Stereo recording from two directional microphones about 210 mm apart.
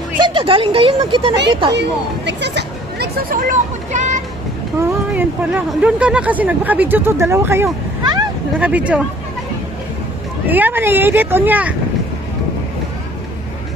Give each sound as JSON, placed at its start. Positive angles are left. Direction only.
{"t": 0.2, "sound": "speech", "side_deg": -25}
{"t": 1.7, "sound": "speech", "side_deg": -55}
{"t": 5.1, "sound": "speech", "side_deg": -5}
{"t": 10.5, "sound": "speech", "side_deg": -10}